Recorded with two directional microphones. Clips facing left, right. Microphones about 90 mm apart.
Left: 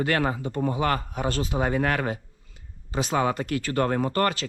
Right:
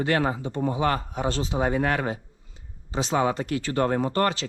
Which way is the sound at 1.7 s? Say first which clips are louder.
Even; 55° left (ahead or behind).